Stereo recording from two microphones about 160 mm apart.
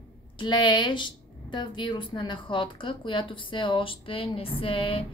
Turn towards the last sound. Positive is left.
turn(degrees=35)  # may be behind; listen again after turning